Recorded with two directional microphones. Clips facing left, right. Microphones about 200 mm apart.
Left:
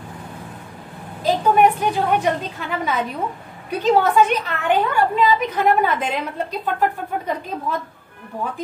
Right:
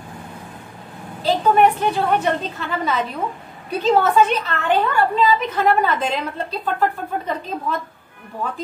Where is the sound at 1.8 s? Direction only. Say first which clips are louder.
Even; 10° left (ahead or behind).